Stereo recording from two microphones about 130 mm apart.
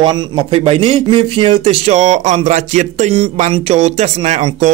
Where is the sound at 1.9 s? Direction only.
65° right (ahead or behind).